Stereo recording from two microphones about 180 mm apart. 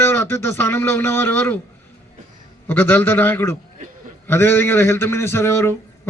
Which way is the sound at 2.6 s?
10° left (ahead or behind).